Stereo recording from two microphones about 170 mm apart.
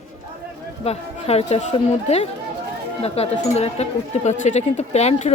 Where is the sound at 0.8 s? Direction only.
35° left (ahead or behind).